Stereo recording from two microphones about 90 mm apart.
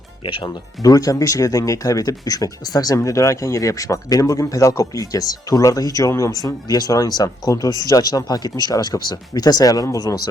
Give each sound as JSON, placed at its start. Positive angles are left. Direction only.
{"t": 0.2, "sound": "speech", "side_deg": 65}